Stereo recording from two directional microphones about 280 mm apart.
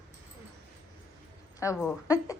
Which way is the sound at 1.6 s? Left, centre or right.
Centre.